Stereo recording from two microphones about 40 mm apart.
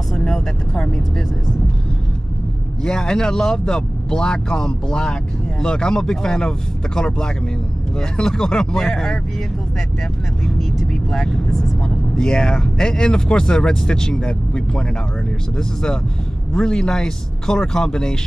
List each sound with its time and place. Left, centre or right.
2.8 s speech: centre
8.2 s speech: centre
10.9 s speech: centre